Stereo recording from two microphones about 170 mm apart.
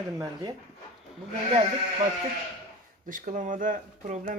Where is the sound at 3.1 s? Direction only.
50° right (ahead or behind).